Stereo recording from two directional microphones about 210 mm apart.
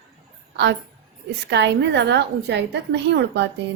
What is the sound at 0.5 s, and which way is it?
A woman's voice, 55° right (ahead or behind).